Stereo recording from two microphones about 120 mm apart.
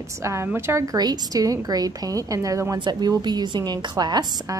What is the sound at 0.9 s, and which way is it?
A woman's voice, 35° right (ahead or behind).